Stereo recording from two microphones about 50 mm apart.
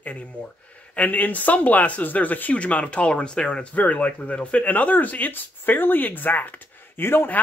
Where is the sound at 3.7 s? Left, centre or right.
Left.